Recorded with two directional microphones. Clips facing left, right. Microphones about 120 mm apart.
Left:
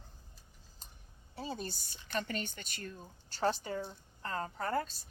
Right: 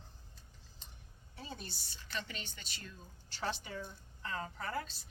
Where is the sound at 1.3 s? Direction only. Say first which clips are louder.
Left 7 dB; 35° left (ahead or behind).